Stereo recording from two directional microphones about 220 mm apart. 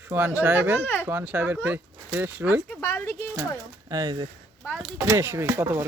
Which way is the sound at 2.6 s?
10° left (ahead or behind).